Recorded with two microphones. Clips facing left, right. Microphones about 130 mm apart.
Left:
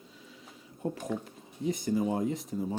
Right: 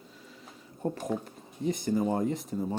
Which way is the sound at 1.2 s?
Centre (ahead or behind).